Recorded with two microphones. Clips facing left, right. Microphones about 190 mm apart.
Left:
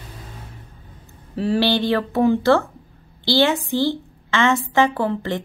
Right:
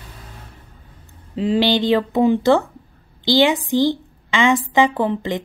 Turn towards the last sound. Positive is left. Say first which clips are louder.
# right 2 dB
turn(degrees=-15)  # may be behind; listen again after turning